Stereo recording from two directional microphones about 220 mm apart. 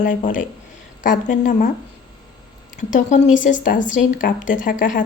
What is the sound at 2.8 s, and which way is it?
Speech, 35° left (ahead or behind).